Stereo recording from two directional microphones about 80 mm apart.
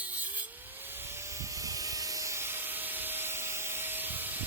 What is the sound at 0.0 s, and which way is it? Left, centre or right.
Vehicle, right.